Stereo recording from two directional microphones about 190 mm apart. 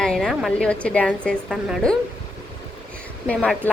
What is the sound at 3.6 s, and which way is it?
Speech, 10° left (ahead or behind).